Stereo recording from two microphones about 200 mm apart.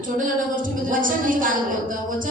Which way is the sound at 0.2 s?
40° right (ahead or behind).